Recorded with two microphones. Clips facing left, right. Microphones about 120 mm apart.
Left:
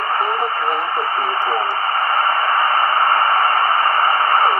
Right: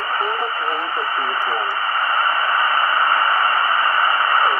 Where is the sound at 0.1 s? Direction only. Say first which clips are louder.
Left 2 dB; 40° left (ahead or behind).